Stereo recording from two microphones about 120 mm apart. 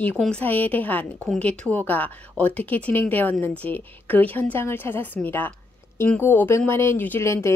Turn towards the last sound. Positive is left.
turn(degrees=25)  # may be behind; listen again after turning